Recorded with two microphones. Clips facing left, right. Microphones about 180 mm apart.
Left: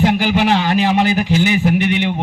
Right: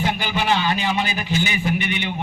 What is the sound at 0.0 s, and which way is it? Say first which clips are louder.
A man's voice: left 8 dB; 80° left.